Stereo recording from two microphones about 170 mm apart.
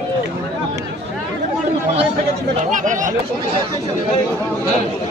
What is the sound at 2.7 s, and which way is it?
Speech, 50° right (ahead or behind).